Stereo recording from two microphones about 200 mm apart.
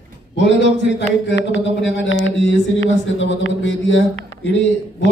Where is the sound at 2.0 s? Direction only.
70° left (ahead or behind).